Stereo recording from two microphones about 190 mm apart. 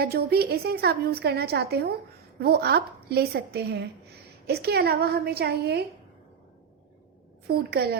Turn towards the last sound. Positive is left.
turn(degrees=-55)  # may be behind; listen again after turning